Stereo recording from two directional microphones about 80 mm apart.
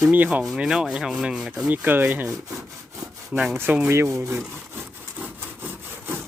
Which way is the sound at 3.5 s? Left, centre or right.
Right.